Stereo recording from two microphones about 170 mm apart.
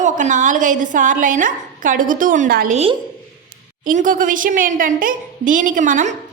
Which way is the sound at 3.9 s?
50° right (ahead or behind).